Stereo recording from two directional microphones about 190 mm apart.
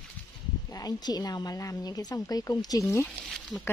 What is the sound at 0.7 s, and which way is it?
A woman's voice, 20° left (ahead or behind).